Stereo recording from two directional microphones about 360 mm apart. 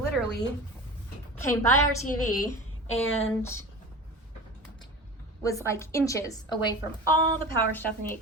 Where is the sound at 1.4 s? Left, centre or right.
Centre.